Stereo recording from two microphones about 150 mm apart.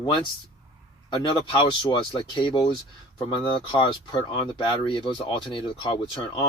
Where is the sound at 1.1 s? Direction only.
35° left (ahead or behind).